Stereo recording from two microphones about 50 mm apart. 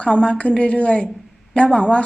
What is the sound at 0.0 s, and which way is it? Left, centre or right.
A woman's voice, left.